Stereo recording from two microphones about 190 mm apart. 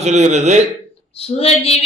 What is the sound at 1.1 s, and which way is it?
Speech, 30° left (ahead or behind).